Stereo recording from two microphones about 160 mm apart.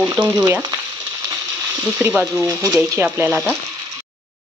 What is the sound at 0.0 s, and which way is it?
Speech, 15° right (ahead or behind).